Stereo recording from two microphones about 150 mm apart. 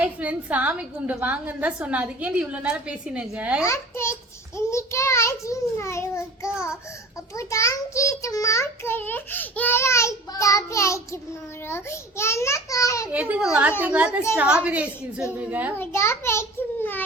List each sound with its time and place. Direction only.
0.0 s a woman's voice: 10° right (ahead or behind)
3.6 s a child's voice: 20° left (ahead or behind)
13.1 s a woman's voice: 10° right (ahead or behind)
15.8 s a child's voice: 15° left (ahead or behind)